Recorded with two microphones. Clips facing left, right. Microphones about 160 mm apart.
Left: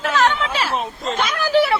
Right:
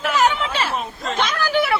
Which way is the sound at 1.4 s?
30° left (ahead or behind).